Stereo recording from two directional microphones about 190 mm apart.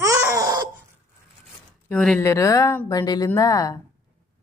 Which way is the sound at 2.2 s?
15° left (ahead or behind).